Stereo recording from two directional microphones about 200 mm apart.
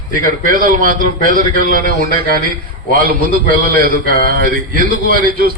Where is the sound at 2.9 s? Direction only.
45° right (ahead or behind).